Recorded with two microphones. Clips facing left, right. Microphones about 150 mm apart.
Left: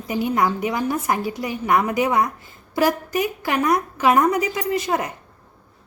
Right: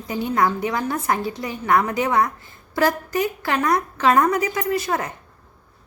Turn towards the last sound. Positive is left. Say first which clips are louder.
# left 1 dB
turn(degrees=15)  # may be behind; listen again after turning